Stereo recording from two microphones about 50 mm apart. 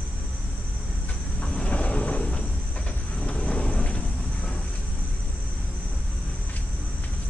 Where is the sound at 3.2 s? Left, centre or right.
Centre.